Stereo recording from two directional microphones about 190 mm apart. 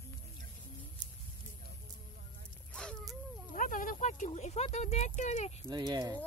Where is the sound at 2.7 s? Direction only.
5° left (ahead or behind).